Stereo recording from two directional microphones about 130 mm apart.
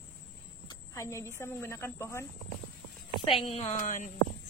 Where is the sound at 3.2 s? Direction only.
45° left (ahead or behind); by 4.1 s 75° left (ahead or behind).